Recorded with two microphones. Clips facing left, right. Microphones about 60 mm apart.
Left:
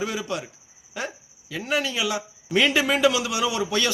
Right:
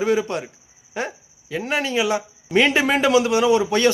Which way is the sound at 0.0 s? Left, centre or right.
Right.